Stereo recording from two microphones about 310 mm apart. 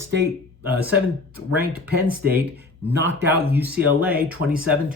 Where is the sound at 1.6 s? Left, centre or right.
Right.